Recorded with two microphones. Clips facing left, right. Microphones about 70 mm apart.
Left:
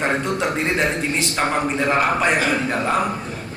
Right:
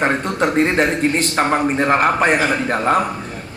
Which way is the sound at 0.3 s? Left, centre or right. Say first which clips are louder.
Right 5 dB; right.